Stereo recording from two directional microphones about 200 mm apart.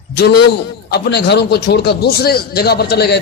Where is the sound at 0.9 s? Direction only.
55° left (ahead or behind).